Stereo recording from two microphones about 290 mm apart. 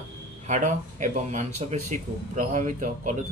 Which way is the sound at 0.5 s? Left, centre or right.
Right.